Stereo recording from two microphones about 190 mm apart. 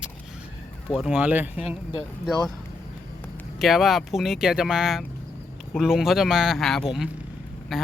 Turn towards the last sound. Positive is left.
turn(degrees=0)  # may be behind; listen again after turning